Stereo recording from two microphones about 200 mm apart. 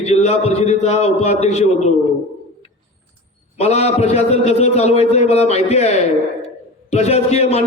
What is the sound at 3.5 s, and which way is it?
A man's voice, 30° left (ahead or behind).